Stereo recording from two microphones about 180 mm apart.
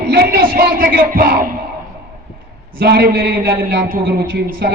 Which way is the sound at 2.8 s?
60° right (ahead or behind).